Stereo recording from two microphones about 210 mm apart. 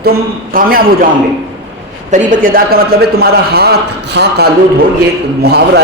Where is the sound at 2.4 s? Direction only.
45° right (ahead or behind).